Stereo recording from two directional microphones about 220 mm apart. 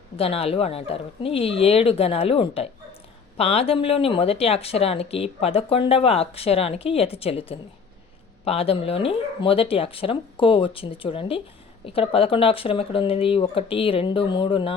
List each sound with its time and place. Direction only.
0.2 s speech: 25° left (ahead or behind)